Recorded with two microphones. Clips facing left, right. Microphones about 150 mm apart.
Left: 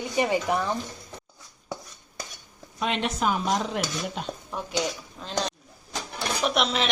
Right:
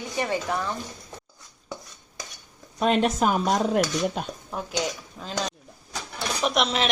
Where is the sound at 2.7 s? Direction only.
45° right (ahead or behind).